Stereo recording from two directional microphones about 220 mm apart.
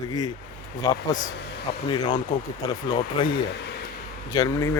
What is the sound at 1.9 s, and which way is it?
Speech, 20° left (ahead or behind).